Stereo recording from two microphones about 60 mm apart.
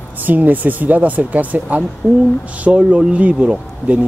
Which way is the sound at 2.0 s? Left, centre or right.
Centre.